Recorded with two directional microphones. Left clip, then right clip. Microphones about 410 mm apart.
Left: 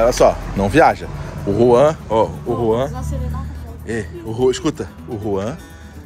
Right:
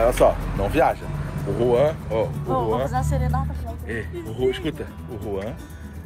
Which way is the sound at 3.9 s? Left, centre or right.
Left.